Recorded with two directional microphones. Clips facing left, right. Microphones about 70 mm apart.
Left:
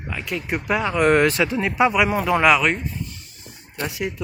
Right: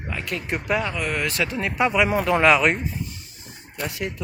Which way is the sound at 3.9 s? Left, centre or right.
Centre.